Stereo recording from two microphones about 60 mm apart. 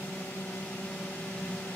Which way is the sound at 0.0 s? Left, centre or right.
Left.